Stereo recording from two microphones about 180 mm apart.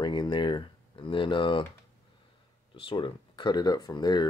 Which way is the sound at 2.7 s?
30° left (ahead or behind).